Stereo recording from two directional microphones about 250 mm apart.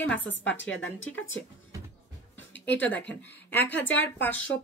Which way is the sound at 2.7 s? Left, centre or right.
Centre.